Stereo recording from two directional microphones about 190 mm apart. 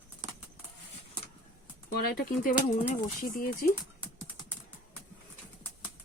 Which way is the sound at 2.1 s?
45° left (ahead or behind).